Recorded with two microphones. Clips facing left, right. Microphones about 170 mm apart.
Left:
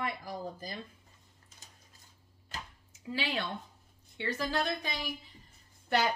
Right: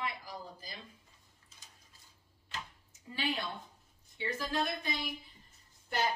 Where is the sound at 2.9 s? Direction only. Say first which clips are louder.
Left 1 dB; 85° left.